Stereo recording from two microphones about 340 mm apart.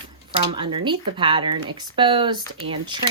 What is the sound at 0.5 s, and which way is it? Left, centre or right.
Speech, centre.